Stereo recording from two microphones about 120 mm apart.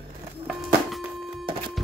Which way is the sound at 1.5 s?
45° right (ahead or behind).